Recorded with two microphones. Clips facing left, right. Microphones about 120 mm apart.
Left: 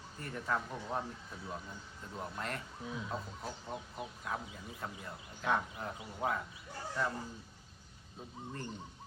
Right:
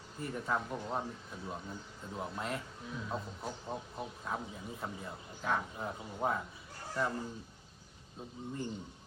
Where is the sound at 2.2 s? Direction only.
5° right (ahead or behind).